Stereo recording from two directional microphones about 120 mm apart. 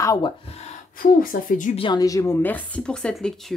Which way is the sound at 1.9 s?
30° left (ahead or behind).